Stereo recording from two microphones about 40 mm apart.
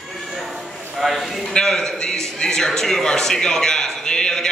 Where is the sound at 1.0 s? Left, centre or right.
Centre.